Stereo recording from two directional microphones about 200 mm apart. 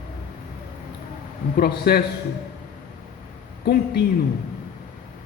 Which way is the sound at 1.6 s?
50° left (ahead or behind).